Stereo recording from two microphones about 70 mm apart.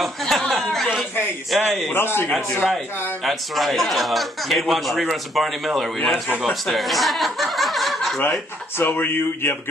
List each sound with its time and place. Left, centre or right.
0.0 s a sound: centre
1.5 s speech: centre
1.9 s a man's voice: left
3.3 s speech: centre
8.2 s speech: left